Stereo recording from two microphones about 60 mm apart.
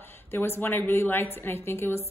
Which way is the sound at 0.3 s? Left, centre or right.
Left.